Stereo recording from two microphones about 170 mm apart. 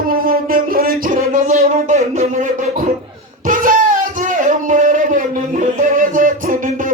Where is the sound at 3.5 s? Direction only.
55° right (ahead or behind).